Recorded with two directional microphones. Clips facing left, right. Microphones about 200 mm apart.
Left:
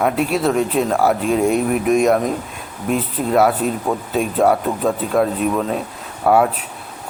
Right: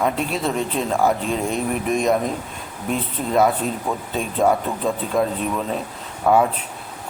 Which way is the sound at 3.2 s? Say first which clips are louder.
Left 2 dB; 5° left (ahead or behind).